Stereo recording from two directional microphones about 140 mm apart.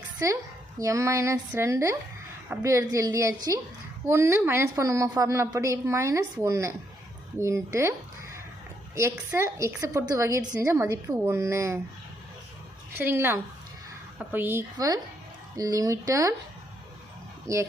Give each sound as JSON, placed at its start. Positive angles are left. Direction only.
{"t": 0.2, "sound": "a woman's voice", "side_deg": -20}
{"t": 9.0, "sound": "a woman's voice", "side_deg": -20}
{"t": 13.0, "sound": "a woman's voice", "side_deg": -15}
{"t": 15.5, "sound": "a woman's voice", "side_deg": -25}
{"t": 17.5, "sound": "a woman's voice", "side_deg": -20}